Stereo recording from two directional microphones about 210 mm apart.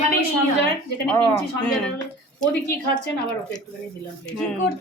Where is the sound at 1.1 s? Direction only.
5° left (ahead or behind).